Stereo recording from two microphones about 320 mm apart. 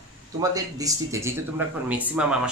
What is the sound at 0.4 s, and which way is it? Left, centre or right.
Speech, centre.